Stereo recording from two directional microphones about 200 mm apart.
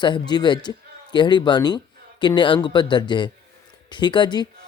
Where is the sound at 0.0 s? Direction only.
20° left (ahead or behind).